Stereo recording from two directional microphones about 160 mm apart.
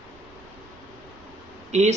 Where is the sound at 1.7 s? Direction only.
45° right (ahead or behind).